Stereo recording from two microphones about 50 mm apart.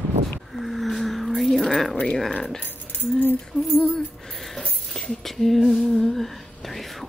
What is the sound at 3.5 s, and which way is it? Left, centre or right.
Music, left.